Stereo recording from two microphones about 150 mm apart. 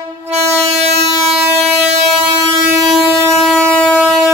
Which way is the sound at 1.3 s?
5° right (ahead or behind).